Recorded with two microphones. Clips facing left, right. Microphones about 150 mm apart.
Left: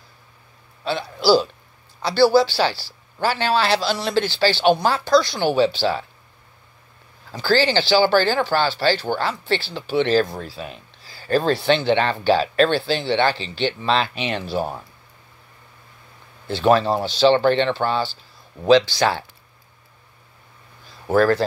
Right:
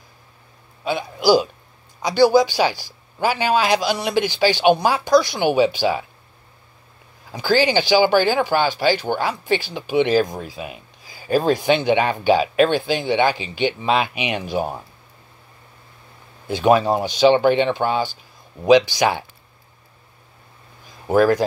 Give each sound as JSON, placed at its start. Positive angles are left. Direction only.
{"t": 0.8, "sound": "speech", "side_deg": -15}
{"t": 7.2, "sound": "speech", "side_deg": -15}
{"t": 16.4, "sound": "speech", "side_deg": -10}
{"t": 21.1, "sound": "speech", "side_deg": -15}